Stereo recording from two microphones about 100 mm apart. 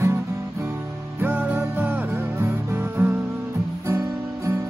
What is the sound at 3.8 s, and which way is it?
Guitar, 25° right (ahead or behind).